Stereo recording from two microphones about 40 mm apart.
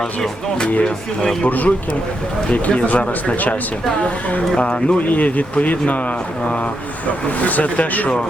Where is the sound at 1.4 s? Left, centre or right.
Left.